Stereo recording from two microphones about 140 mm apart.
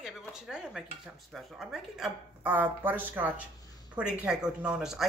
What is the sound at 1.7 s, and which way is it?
A woman's voice, 10° right (ahead or behind).